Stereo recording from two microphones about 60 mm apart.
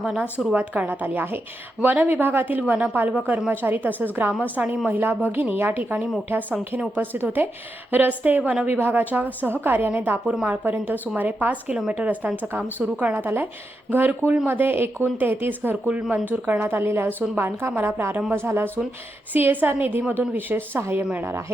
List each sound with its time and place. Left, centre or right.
0.0 s a woman's voice: centre; by 2.6 s right
2.6 s a woman's voice: centre
10.2 s speech: centre
10.5 s a woman's voice: right
15.9 s a woman's voice: centre
16.3 s a woman's voice: right